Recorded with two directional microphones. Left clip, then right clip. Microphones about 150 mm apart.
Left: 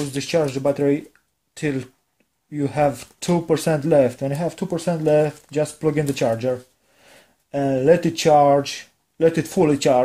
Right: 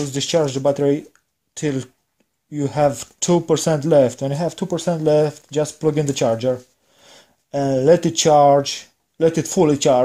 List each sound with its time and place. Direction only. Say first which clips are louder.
0.1 s speech: right 2 dB; 35° right (ahead or behind)